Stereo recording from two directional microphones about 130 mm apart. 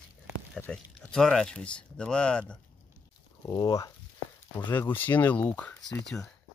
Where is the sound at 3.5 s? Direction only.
30° left (ahead or behind).